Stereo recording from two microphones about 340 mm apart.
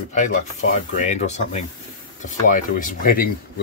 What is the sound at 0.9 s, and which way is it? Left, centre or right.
Speech, left.